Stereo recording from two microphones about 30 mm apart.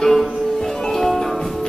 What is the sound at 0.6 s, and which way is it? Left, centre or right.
Music, centre.